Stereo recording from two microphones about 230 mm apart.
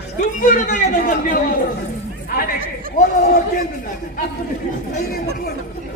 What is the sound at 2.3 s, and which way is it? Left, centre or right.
Chatter, left.